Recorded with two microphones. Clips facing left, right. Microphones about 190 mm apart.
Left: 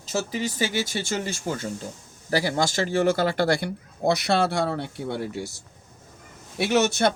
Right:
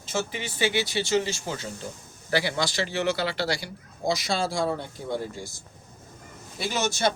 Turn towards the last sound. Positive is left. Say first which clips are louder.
# left 5 dB
turn(degrees=60)  # may be behind; listen again after turning